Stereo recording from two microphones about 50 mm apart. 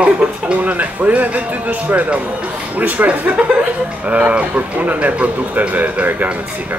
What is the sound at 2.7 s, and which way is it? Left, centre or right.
Speech, right.